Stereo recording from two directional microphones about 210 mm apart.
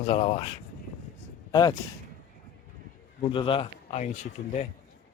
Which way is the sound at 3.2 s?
25° left (ahead or behind).